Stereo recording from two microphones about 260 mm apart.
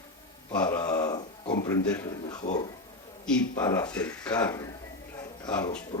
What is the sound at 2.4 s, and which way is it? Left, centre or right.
Speech, left.